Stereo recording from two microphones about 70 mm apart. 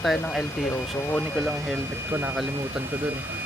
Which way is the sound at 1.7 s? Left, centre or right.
Right.